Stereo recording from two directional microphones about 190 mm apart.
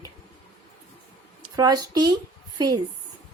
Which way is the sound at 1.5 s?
20° right (ahead or behind).